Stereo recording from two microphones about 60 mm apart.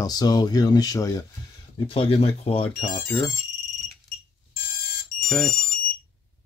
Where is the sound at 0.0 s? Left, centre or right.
Left.